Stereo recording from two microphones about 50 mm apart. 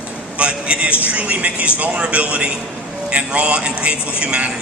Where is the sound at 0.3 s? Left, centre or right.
Right.